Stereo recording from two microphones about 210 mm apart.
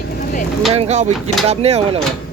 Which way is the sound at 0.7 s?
30° right (ahead or behind).